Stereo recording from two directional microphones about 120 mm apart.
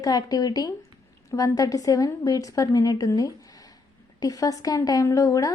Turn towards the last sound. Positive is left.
turn(degrees=30)  # may be behind; listen again after turning